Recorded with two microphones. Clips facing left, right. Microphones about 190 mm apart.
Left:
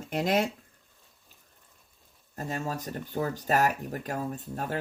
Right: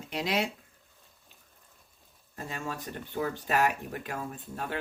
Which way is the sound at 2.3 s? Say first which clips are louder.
Left 4 dB; 40° left (ahead or behind).